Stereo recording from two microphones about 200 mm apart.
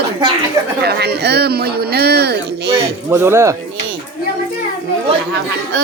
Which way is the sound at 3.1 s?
10° right (ahead or behind).